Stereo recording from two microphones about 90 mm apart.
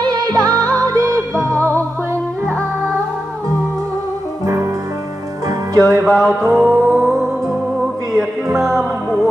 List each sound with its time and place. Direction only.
0.0 s music: 50° right (ahead or behind); by 1.8 s 35° right (ahead or behind)
5.8 s music: 40° right (ahead or behind)
6.0 s music: centre (ahead or behind)
6.7 s music: 25° right (ahead or behind)
8.5 s music: 35° right (ahead or behind)